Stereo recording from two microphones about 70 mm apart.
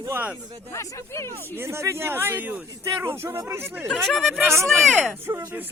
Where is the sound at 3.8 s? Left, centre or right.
Centre.